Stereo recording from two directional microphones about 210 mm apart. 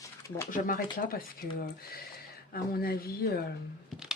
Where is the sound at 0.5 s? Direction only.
40° left (ahead or behind).